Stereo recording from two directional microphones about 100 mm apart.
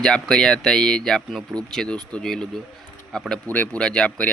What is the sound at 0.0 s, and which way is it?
Speech, 5° left (ahead or behind).